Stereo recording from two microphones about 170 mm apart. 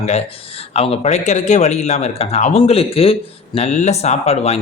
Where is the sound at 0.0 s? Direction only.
35° left (ahead or behind).